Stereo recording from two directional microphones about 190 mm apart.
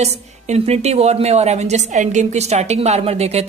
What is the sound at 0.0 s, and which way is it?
A woman's voice, 35° right (ahead or behind).